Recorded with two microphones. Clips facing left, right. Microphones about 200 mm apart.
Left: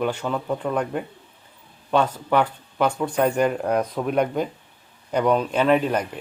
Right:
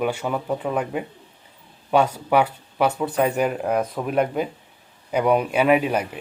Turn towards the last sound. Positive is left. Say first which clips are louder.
# right 1 dB
turn(degrees=-10)  # may be behind; listen again after turning